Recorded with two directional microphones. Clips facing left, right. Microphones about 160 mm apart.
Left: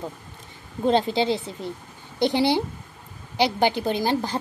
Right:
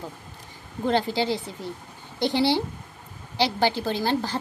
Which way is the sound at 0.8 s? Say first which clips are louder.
Left 3 dB; 20° left (ahead or behind).